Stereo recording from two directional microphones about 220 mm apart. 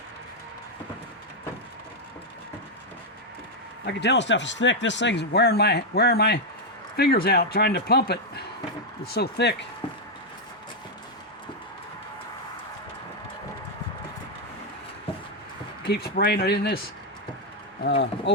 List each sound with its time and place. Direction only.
3.8 s speech: 50° left (ahead or behind)
15.8 s speech: 45° left (ahead or behind)
17.8 s speech: 50° left (ahead or behind)